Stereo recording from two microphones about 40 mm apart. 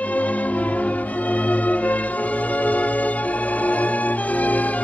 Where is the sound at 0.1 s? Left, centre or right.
Left.